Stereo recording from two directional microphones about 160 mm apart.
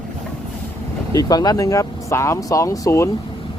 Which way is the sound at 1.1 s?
25° left (ahead or behind).